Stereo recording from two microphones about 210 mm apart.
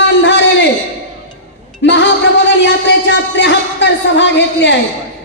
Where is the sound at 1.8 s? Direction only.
60° left (ahead or behind).